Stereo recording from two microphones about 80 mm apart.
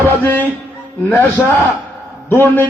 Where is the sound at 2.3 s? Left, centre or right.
Left.